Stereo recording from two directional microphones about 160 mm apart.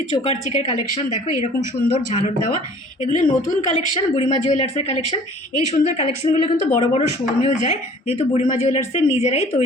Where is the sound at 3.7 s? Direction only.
35° left (ahead or behind).